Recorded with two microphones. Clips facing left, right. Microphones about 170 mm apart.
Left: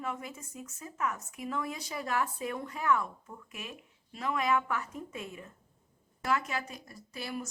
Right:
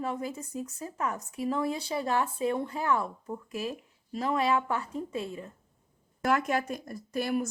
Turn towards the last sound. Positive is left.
turn(degrees=-55)  # may be behind; listen again after turning